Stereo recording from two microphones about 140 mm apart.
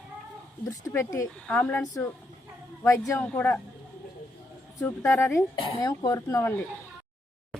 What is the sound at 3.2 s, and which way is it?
Speech, 10° left (ahead or behind).